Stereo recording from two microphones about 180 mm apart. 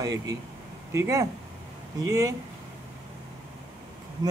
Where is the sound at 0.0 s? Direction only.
20° right (ahead or behind).